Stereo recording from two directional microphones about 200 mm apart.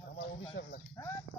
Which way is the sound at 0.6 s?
60° left (ahead or behind).